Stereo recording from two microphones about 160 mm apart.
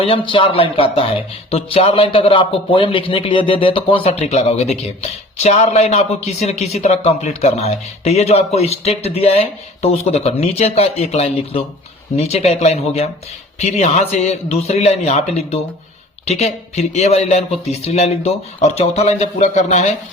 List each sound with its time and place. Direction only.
0.0 s speech: 35° left (ahead or behind)